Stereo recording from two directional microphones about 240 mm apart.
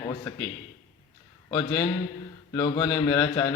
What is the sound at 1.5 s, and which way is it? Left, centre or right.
A man's voice, centre.